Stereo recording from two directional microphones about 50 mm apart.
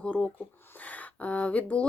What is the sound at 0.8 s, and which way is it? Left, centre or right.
Speech, left.